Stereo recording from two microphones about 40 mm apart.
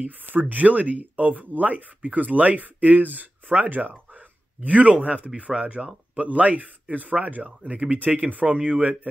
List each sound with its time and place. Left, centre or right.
0.0 s speech: right